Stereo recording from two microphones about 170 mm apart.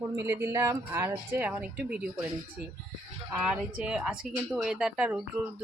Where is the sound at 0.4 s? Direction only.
15° right (ahead or behind).